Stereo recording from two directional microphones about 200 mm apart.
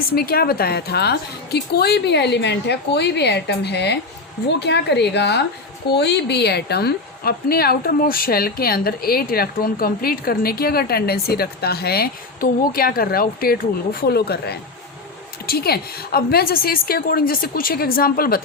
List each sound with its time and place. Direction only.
0.1 s a woman's voice: 50° left (ahead or behind)